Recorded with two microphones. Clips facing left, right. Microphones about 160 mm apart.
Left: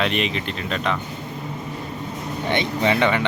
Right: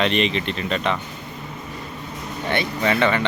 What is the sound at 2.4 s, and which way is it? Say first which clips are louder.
Speech: left 1 dB; 20° left (ahead or behind).